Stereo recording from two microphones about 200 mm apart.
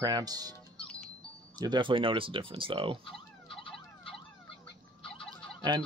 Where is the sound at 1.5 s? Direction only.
20° right (ahead or behind).